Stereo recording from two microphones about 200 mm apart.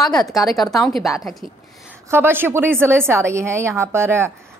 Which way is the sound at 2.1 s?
10° right (ahead or behind).